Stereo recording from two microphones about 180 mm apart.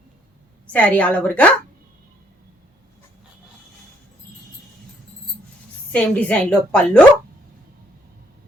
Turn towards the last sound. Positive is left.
turn(degrees=5)  # may be behind; listen again after turning